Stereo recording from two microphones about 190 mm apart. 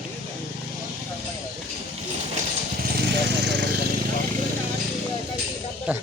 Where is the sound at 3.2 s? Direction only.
65° right (ahead or behind).